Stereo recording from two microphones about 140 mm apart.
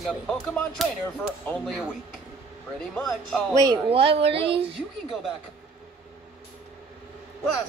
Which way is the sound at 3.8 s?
45° right (ahead or behind).